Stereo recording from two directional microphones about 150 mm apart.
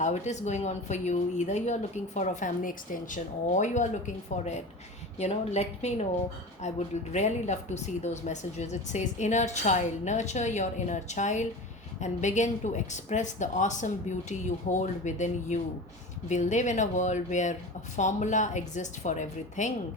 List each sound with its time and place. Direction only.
0.0 s a woman's voice: 50° left (ahead or behind)